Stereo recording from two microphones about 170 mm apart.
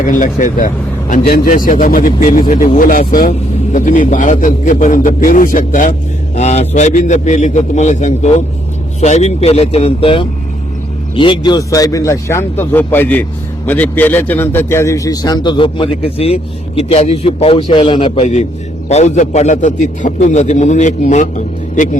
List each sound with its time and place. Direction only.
0.0 s a man's voice: 50° left (ahead or behind)